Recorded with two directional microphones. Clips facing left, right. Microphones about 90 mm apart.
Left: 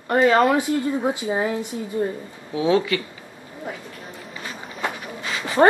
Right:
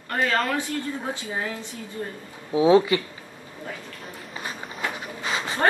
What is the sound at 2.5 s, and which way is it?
Speech, 25° right (ahead or behind).